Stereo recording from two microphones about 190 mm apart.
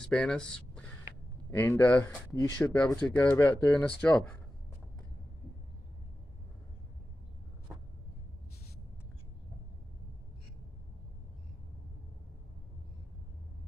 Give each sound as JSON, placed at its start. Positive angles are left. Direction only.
{"t": 0.1, "sound": "speech", "side_deg": 5}